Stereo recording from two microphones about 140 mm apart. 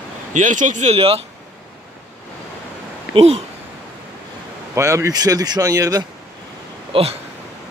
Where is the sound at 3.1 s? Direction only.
45° right (ahead or behind).